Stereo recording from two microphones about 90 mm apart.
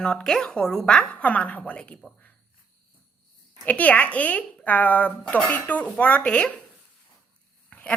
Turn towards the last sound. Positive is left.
turn(degrees=20)  # may be behind; listen again after turning